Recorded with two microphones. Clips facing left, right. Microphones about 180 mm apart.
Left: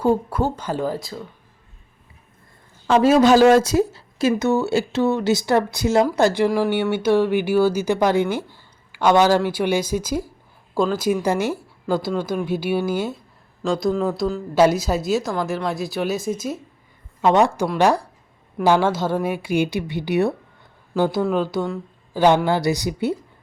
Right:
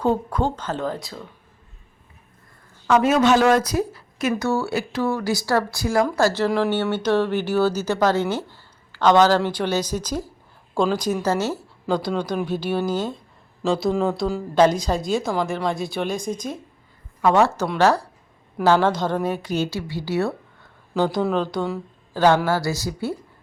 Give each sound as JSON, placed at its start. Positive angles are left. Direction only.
{"t": 0.0, "sound": "speech", "side_deg": 10}
{"t": 2.8, "sound": "speech", "side_deg": 30}
{"t": 13.6, "sound": "a woman's voice", "side_deg": -5}
{"t": 17.2, "sound": "speech", "side_deg": 20}